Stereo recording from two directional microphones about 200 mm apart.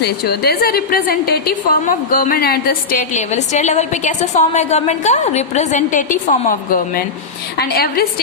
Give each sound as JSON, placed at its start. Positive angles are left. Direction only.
{"t": 0.0, "sound": "a woman's voice", "side_deg": 50}